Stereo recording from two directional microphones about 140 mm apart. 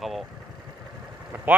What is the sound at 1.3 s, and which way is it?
Speech, 15° right (ahead or behind).